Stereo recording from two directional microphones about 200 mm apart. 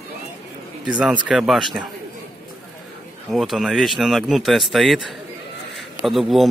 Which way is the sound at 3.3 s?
Centre (ahead or behind).